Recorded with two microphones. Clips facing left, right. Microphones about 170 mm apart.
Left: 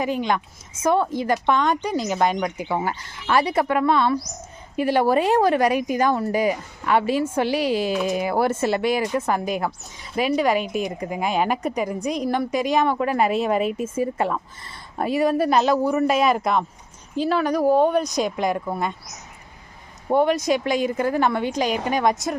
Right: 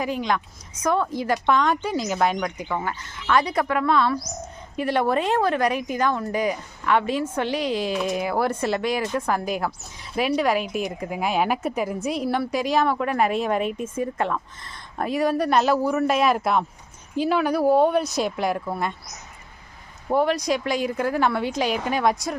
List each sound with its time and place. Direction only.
0.0 s a woman's voice: centre (ahead or behind)
2.7 s speech: 30° left (ahead or behind)
3.3 s a woman's voice: 5° left (ahead or behind)
20.1 s a woman's voice: centre (ahead or behind)